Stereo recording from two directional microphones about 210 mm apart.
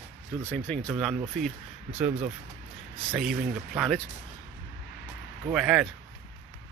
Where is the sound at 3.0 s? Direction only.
5° left (ahead or behind).